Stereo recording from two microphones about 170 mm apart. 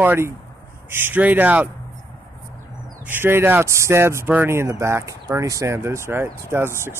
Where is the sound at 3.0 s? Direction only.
10° right (ahead or behind).